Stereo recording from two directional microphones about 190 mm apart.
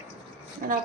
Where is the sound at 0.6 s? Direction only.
45° right (ahead or behind).